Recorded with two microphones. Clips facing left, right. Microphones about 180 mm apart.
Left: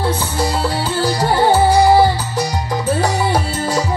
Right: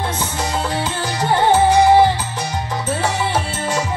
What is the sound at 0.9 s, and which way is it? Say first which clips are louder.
Music: left 4 dB; 35° left (ahead or behind).